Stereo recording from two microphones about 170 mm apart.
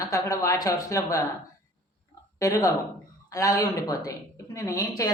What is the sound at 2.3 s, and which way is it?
A woman's voice, 20° left (ahead or behind).